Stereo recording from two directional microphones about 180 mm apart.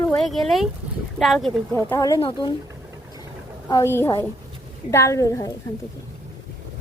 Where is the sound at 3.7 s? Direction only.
15° left (ahead or behind).